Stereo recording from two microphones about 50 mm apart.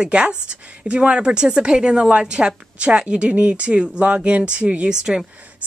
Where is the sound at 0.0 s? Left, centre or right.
Centre.